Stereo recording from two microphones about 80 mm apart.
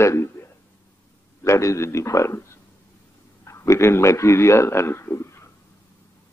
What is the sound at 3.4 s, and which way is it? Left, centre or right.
A man's voice, left.